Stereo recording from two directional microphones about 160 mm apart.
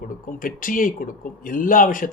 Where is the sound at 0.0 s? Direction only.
60° left (ahead or behind).